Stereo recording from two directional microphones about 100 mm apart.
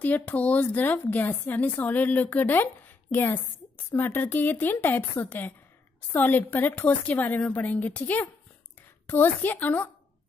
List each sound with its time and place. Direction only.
0.0 s speech: 15° left (ahead or behind)